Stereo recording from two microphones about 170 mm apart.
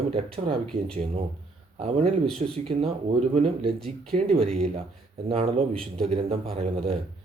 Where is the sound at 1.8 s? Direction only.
35° right (ahead or behind).